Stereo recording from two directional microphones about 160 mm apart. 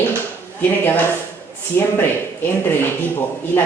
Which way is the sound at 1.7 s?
15° left (ahead or behind).